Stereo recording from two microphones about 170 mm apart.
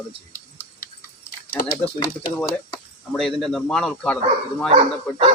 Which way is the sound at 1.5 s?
60° left (ahead or behind).